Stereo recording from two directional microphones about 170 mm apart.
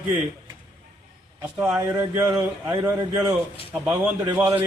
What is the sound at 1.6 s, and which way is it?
Speech, 10° right (ahead or behind).